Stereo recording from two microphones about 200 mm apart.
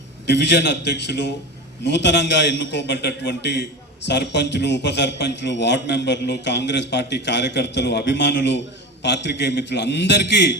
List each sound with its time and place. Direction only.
0.3 s a man's voice: 60° left (ahead or behind)